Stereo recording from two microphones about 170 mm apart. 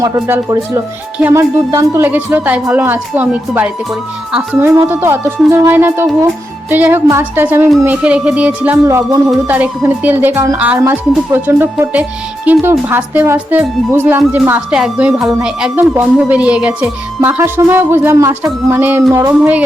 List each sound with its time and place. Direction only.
0.0 s speech: 20° right (ahead or behind)